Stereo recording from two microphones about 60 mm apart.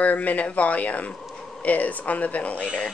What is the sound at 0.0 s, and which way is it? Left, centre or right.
Speech, left.